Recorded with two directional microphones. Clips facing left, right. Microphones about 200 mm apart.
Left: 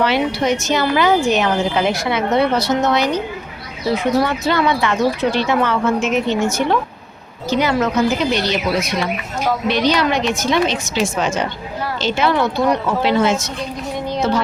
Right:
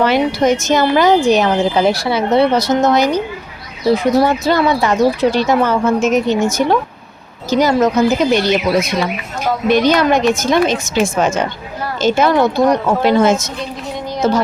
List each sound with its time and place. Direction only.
0.0 s a woman's voice: 45° right (ahead or behind)